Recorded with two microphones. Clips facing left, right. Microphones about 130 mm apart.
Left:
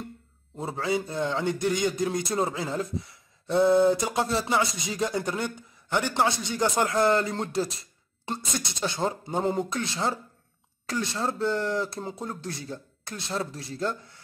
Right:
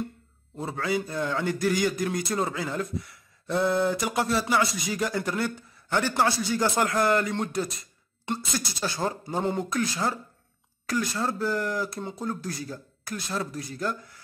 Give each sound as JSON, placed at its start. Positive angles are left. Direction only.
{"t": 0.6, "sound": "speech", "side_deg": 25}